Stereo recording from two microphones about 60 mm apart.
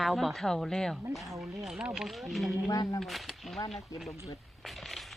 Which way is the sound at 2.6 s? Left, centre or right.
Left.